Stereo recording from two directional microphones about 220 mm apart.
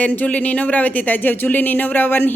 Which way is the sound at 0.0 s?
5° left (ahead or behind).